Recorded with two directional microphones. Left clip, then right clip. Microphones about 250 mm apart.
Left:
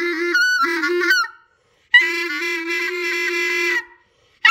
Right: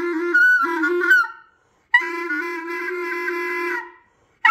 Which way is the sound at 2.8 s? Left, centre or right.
Left.